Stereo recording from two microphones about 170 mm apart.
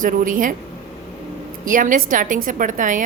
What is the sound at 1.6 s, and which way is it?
A woman's voice, 50° right (ahead or behind).